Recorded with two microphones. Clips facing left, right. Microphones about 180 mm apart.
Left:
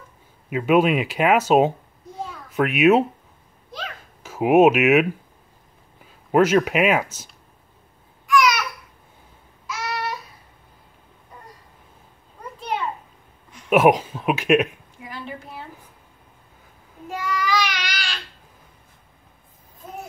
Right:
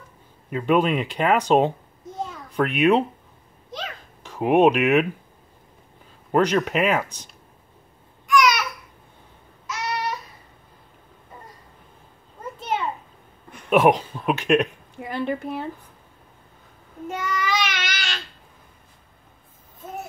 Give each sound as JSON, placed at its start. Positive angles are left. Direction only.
{"t": 0.5, "sound": "speech", "side_deg": 5}
{"t": 2.2, "sound": "a sound", "side_deg": 5}
{"t": 6.3, "sound": "speech", "side_deg": 5}
{"t": 8.3, "sound": "babbling", "side_deg": 0}
{"t": 9.7, "sound": "babbling", "side_deg": 0}
{"t": 12.5, "sound": "a sound", "side_deg": 0}
{"t": 13.7, "sound": "speech", "side_deg": 5}
{"t": 15.0, "sound": "a woman's voice", "side_deg": -60}
{"t": 17.1, "sound": "child singing", "side_deg": 0}